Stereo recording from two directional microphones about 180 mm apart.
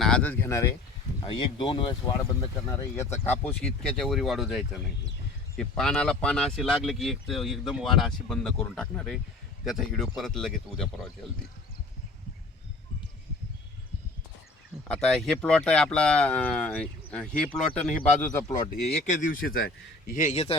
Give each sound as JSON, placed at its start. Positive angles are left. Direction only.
{"t": 0.0, "sound": "speech", "side_deg": 5}
{"t": 1.3, "sound": "speech", "side_deg": 25}
{"t": 2.9, "sound": "speech", "side_deg": 15}
{"t": 14.8, "sound": "speech", "side_deg": 5}
{"t": 18.3, "sound": "speech", "side_deg": 20}
{"t": 18.9, "sound": "a man's voice", "side_deg": 40}